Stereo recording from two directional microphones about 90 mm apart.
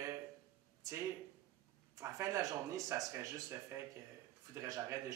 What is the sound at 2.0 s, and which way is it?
A man's voice, 40° right (ahead or behind).